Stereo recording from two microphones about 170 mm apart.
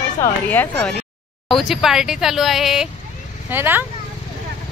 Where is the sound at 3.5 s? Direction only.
10° right (ahead or behind).